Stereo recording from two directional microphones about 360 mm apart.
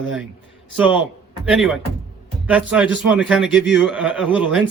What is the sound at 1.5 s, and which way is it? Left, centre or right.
Speech, centre.